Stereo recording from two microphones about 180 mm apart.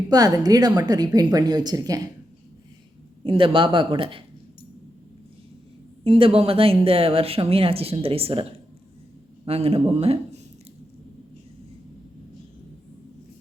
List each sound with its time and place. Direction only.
0.1 s a woman's voice: 20° right (ahead or behind)
3.2 s a woman's voice: 30° right (ahead or behind)
6.1 s speech: 30° right (ahead or behind)